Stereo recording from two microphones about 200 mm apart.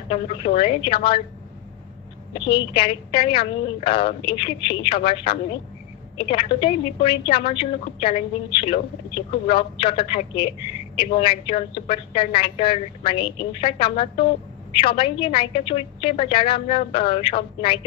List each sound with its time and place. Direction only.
0.1 s a woman's voice: 25° left (ahead or behind)
2.3 s a woman's voice: 25° left (ahead or behind)